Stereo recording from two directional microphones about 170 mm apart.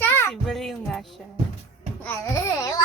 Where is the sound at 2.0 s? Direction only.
20° left (ahead or behind).